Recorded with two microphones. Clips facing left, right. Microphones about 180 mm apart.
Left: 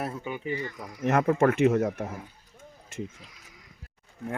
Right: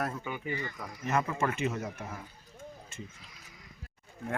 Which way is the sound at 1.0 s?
65° left (ahead or behind).